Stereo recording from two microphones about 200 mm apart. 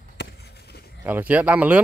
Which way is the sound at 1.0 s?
10° right (ahead or behind).